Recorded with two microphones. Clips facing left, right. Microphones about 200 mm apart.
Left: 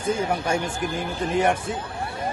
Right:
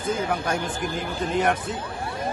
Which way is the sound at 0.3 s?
10° left (ahead or behind).